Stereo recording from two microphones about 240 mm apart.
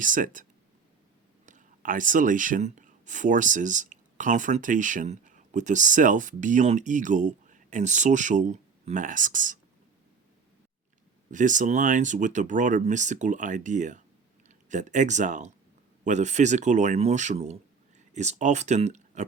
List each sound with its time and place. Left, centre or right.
0.0 s speech: right
1.5 s speech: right
11.3 s speech: right